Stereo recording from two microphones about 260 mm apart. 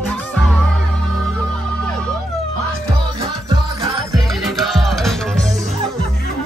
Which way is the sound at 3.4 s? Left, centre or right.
Centre.